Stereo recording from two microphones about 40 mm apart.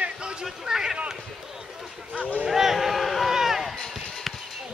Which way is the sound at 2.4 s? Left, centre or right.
Centre.